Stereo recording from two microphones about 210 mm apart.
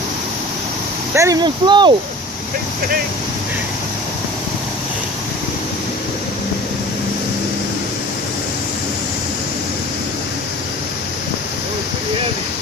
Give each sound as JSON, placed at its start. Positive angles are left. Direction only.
{"t": 1.1, "sound": "speech", "side_deg": -15}